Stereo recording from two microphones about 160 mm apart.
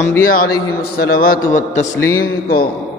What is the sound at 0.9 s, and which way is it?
Mantra, 70° left (ahead or behind).